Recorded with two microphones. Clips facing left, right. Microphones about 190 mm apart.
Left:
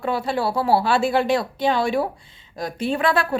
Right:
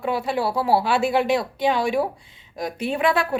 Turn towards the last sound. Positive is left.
turn(degrees=-15)  # may be behind; listen again after turning